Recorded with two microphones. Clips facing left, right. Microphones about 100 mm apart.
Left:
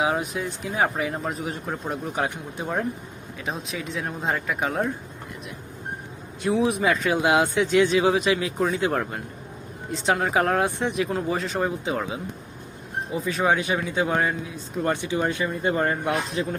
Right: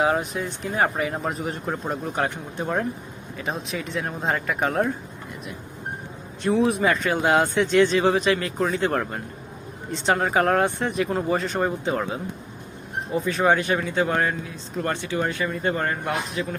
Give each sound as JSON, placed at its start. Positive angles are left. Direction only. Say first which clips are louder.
{"t": 0.0, "sound": "speech", "louder": "right 2 dB", "side_deg": 0}
{"t": 6.4, "sound": "speech", "louder": "right 1 dB", "side_deg": 0}
{"t": 16.3, "sound": "a man's voice", "louder": "left 1 dB", "side_deg": 30}